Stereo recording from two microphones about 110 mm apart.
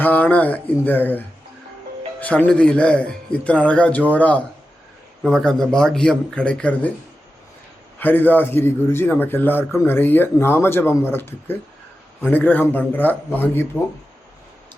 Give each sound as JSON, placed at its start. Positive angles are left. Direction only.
{"t": 0.0, "sound": "speech", "side_deg": 15}
{"t": 2.2, "sound": "speech", "side_deg": 10}
{"t": 7.9, "sound": "a man's voice", "side_deg": 15}